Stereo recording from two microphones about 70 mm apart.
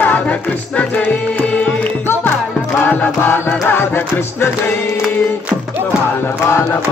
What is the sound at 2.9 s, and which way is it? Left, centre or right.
Music, left.